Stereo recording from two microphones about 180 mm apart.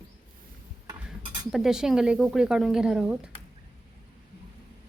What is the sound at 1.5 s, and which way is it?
Speech, 5° right (ahead or behind).